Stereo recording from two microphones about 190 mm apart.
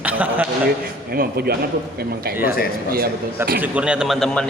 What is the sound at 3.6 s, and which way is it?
Speech, 5° right (ahead or behind).